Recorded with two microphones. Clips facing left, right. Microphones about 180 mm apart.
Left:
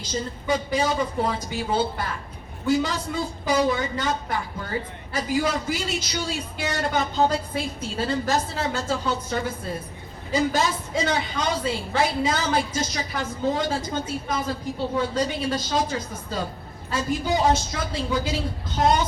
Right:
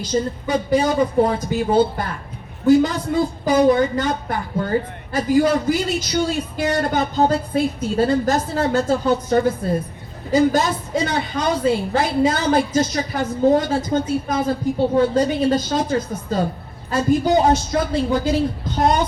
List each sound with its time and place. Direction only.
0.1 s a woman's voice: 55° right (ahead or behind)